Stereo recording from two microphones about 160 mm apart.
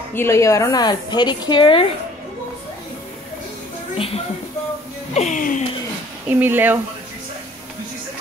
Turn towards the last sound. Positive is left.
turn(degrees=-10)  # may be behind; listen again after turning